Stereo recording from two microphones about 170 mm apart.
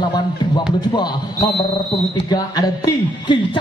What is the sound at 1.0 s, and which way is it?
Speech, 25° left (ahead or behind).